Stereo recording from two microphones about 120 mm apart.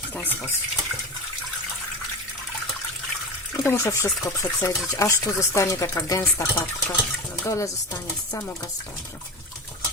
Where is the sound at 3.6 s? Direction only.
25° left (ahead or behind).